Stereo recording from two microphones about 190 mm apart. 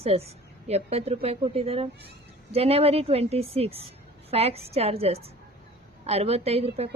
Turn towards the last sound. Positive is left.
turn(degrees=-35)  # may be behind; listen again after turning